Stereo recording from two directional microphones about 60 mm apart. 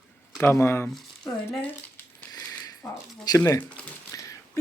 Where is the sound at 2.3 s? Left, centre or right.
Left.